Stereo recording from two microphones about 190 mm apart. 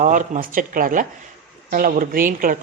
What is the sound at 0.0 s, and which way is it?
A woman's voice, 40° right (ahead or behind).